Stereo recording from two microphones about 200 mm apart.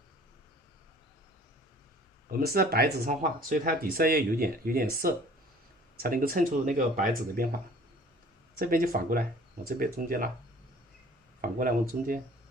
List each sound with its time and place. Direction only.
2.4 s speech: 50° right (ahead or behind)
8.5 s speech: 45° right (ahead or behind)
11.3 s speech: 45° right (ahead or behind)